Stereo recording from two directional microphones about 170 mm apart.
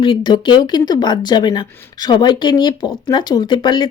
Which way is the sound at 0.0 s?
30° left (ahead or behind).